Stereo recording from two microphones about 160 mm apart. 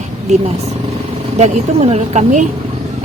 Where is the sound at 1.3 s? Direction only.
45° right (ahead or behind).